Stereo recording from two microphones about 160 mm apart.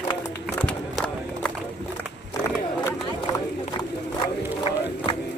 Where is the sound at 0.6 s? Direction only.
5° left (ahead or behind).